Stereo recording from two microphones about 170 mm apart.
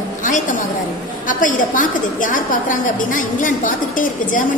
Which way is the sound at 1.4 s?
50° left (ahead or behind).